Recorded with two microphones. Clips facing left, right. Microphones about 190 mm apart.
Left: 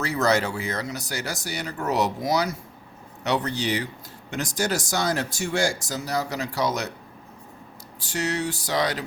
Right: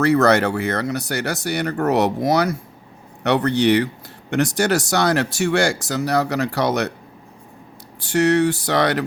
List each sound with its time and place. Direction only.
0.0 s speech: 65° right (ahead or behind)
7.9 s speech: 65° right (ahead or behind)